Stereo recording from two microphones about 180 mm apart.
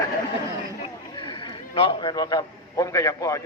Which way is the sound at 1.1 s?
25° left (ahead or behind).